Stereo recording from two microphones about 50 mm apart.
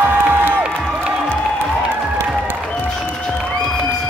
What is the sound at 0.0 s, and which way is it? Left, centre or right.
Music, right.